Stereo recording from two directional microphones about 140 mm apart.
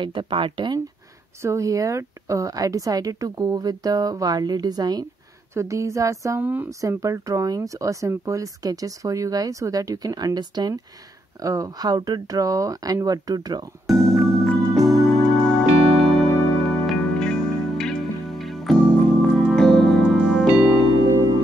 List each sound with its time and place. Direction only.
0.0 s speech: 35° right (ahead or behind)
1.4 s speech: 20° right (ahead or behind)
13.8 s music: centre (ahead or behind)